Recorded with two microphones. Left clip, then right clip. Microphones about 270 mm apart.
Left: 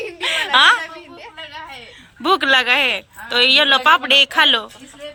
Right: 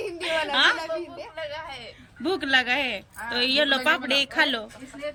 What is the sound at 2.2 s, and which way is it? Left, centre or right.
Speech, centre.